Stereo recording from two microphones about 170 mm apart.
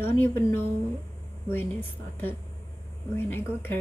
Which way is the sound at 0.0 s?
15° left (ahead or behind).